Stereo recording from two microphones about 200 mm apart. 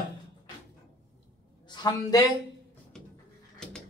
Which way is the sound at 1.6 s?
20° left (ahead or behind).